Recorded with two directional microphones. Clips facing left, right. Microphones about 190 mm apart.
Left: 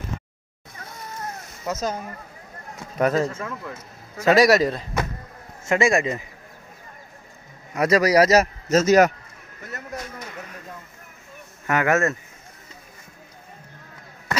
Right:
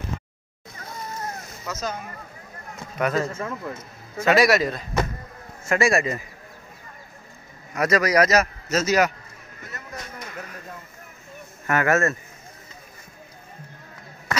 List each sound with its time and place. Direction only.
1.7 s speech: 45° left (ahead or behind)
3.0 s a man's voice: 35° left (ahead or behind)
3.3 s a man's voice: 5° right (ahead or behind)
4.2 s a man's voice: 40° left (ahead or behind)
5.7 s a man's voice: 20° left (ahead or behind)
7.7 s a man's voice: 30° left (ahead or behind); by 9.1 s 45° left (ahead or behind)
11.6 s speech: 15° left (ahead or behind)